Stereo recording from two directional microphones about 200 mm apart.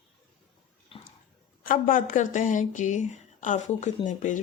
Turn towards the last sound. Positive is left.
turn(degrees=40)  # may be behind; listen again after turning